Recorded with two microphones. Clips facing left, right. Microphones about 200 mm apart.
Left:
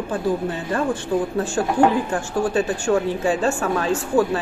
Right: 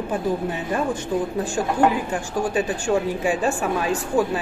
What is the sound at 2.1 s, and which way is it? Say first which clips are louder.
A woman's voice: left 2 dB; 15° right (ahead or behind).